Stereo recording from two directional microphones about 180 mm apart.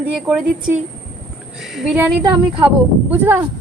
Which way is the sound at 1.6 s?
Centre (ahead or behind).